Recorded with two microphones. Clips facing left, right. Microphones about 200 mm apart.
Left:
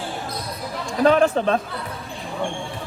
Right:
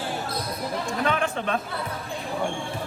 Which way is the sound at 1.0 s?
35° left (ahead or behind).